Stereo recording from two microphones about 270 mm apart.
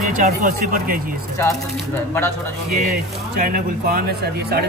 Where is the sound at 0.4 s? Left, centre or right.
Right.